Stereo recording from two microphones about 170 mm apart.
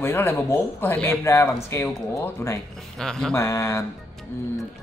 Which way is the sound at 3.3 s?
15° left (ahead or behind).